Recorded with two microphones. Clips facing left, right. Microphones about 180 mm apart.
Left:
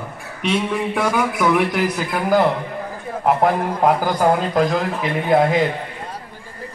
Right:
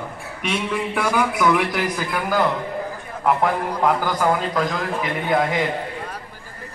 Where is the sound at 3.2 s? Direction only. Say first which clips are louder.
Left 3 dB; 45° left (ahead or behind).